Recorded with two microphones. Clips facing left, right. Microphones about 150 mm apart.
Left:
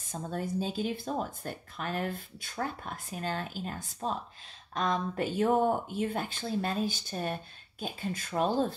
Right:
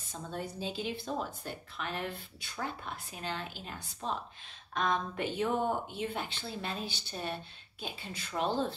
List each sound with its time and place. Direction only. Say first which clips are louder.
0.1 s speech: left 6 dB; 45° left (ahead or behind)